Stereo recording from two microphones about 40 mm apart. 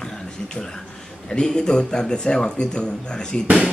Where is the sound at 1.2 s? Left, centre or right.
Centre.